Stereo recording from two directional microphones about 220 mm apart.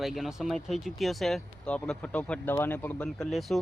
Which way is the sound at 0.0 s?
Centre (ahead or behind).